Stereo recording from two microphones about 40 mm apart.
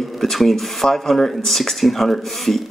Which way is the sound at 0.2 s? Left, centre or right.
Centre.